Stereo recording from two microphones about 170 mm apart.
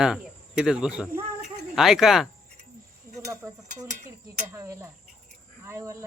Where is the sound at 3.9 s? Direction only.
50° right (ahead or behind).